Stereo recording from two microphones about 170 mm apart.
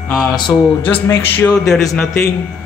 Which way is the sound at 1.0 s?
15° left (ahead or behind).